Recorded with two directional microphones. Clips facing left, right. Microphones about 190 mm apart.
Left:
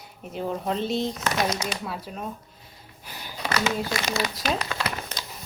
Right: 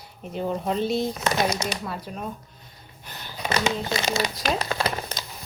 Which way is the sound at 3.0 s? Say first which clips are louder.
Even; 10° left (ahead or behind).